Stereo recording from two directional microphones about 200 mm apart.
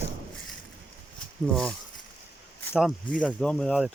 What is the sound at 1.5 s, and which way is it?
Speech, 5° left (ahead or behind).